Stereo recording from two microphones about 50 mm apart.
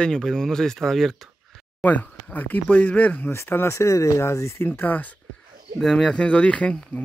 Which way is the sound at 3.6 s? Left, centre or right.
Left.